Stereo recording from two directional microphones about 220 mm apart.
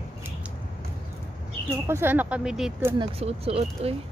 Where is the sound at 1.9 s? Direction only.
10° right (ahead or behind).